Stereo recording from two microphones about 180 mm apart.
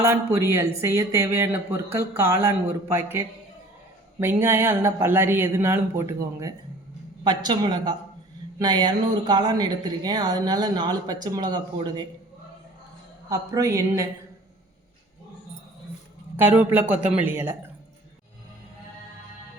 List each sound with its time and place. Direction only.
0.0 s speech: 15° right (ahead or behind)
13.3 s speech: 15° right (ahead or behind)
16.4 s speech: 10° right (ahead or behind)